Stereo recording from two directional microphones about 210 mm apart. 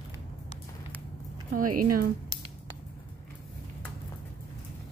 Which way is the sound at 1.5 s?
40° right (ahead or behind).